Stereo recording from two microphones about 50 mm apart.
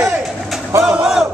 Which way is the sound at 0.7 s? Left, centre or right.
Right.